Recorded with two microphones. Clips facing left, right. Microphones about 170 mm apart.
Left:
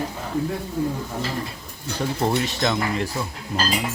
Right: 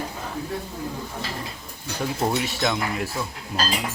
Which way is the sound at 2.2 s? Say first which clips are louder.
Left 2 dB; 5° right (ahead or behind).